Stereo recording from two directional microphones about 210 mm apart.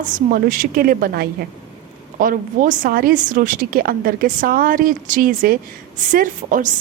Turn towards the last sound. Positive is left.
turn(degrees=-40)  # may be behind; listen again after turning